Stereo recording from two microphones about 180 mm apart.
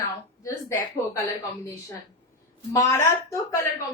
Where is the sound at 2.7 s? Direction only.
15° left (ahead or behind).